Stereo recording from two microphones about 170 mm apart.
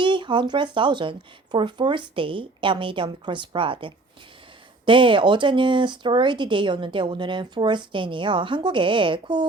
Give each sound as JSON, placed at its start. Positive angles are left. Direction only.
{"t": 0.0, "sound": "speech", "side_deg": -30}